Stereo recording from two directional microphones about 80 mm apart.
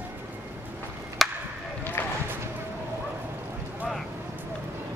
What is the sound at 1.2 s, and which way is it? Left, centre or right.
Chop, centre.